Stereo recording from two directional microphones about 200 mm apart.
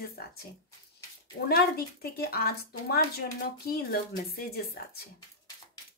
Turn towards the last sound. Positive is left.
turn(degrees=50)  # may be behind; listen again after turning